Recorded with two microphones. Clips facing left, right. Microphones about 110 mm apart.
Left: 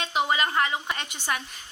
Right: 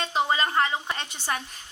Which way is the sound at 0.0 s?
35° right (ahead or behind).